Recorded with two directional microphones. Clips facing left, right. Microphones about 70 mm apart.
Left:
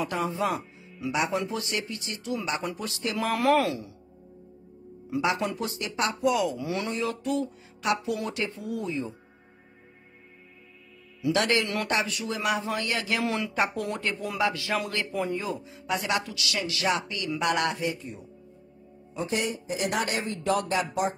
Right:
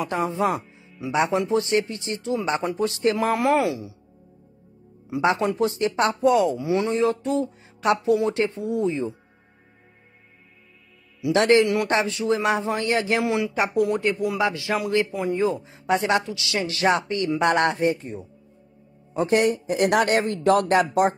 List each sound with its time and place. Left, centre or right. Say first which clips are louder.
0.0 s speech: right 4 dB; right
5.2 s speech: right 7 dB; right
11.3 s speech: right 9 dB; right
13.7 s speech: right 9 dB; centre
14.4 s speech: left 1 dB; right
15.3 s speech: right 8 dB; right
19.1 s speech: right 9 dB; right